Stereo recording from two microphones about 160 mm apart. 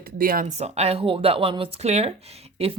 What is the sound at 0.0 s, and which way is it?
Speech, 65° right (ahead or behind).